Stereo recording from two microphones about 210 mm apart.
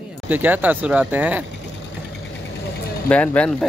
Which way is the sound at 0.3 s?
10° right (ahead or behind).